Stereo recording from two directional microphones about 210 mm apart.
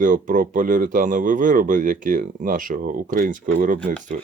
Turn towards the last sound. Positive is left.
turn(degrees=-40)  # may be behind; listen again after turning